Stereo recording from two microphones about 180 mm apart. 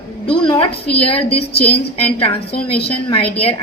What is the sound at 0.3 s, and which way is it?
A woman's voice, 25° left (ahead or behind).